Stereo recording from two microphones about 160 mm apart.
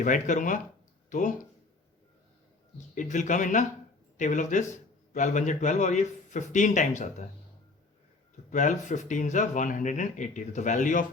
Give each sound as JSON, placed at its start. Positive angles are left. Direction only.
{"t": 0.0, "sound": "a man's voice", "side_deg": 55}
{"t": 2.9, "sound": "a man's voice", "side_deg": 50}
{"t": 8.4, "sound": "a man's voice", "side_deg": 50}